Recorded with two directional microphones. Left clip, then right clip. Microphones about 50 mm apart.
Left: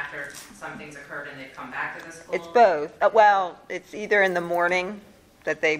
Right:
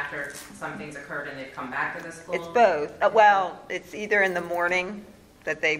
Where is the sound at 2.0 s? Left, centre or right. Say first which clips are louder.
Even; left.